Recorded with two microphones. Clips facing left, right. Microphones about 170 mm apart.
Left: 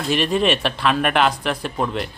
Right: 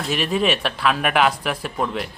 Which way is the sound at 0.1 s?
5° right (ahead or behind).